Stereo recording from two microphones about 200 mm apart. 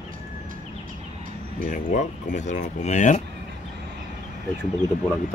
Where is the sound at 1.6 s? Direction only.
40° left (ahead or behind).